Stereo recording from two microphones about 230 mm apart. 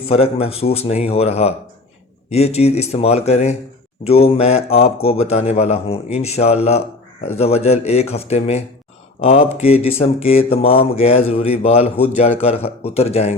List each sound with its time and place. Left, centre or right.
0.1 s speech: left